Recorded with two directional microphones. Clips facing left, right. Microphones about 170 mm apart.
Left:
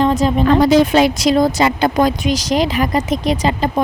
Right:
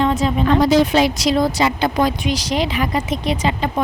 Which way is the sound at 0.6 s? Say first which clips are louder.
Left 2 dB; 50° left (ahead or behind).